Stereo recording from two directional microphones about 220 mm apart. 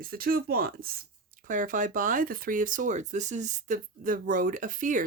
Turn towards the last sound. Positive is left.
turn(degrees=-35)  # may be behind; listen again after turning